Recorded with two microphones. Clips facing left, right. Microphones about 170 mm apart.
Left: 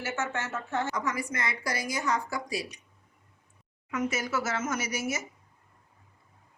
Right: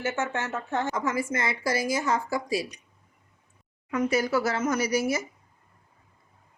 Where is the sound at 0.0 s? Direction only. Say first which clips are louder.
Right 4 dB; 15° right (ahead or behind).